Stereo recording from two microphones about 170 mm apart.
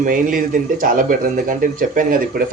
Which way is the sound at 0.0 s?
55° right (ahead or behind).